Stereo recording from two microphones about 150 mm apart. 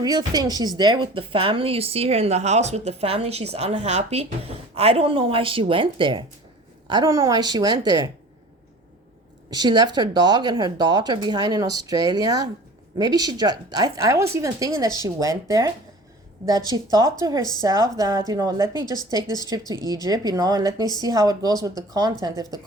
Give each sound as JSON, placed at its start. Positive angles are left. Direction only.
{"t": 0.0, "sound": "a woman's voice", "side_deg": -25}
{"t": 7.1, "sound": "speech", "side_deg": -20}
{"t": 9.5, "sound": "speech", "side_deg": -30}